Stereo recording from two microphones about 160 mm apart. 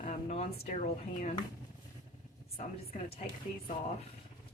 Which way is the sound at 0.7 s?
50° left (ahead or behind).